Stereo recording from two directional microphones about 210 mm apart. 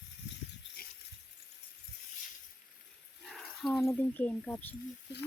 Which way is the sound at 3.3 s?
Centre (ahead or behind).